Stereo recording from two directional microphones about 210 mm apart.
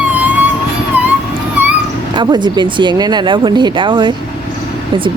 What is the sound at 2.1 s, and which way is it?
Speech, 20° right (ahead or behind).